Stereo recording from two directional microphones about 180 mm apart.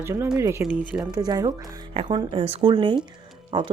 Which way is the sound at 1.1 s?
20° right (ahead or behind).